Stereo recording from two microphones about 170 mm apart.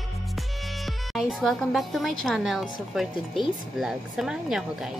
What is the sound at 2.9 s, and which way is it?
A child's voice, centre (ahead or behind).